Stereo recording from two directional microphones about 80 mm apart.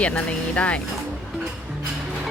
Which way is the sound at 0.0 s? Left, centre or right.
Centre.